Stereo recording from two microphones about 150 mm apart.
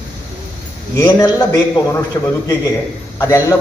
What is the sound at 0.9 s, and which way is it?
A man's voice, 25° left (ahead or behind).